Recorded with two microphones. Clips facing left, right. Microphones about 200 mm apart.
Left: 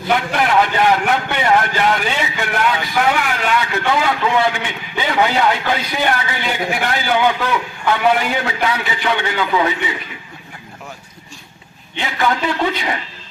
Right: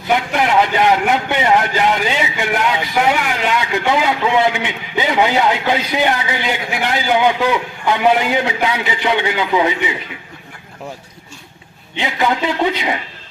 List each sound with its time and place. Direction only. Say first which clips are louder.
0.3 s a man's voice: right 1 dB; 20° right (ahead or behind)
11.9 s a man's voice: right 1 dB; 15° right (ahead or behind)